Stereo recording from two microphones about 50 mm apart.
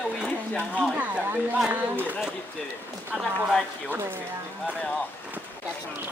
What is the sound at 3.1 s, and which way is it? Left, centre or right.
Speech, centre.